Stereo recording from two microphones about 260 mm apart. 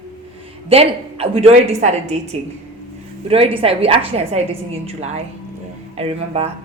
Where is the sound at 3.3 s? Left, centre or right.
Right.